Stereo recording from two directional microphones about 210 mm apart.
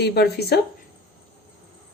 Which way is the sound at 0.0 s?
50° left (ahead or behind).